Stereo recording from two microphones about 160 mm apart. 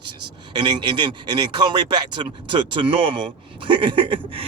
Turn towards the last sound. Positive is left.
turn(degrees=-35)  # may be behind; listen again after turning